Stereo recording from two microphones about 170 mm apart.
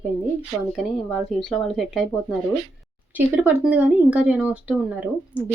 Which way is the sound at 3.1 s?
10° right (ahead or behind).